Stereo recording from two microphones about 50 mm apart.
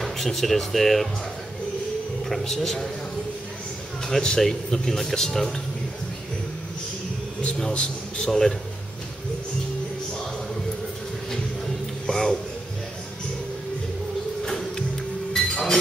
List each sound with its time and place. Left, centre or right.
0.0 s speech: centre
2.2 s a man's voice: centre
4.4 s speech: centre
7.4 s speech: centre
11.6 s music: centre
14.4 s music: centre
15.3 s chink: centre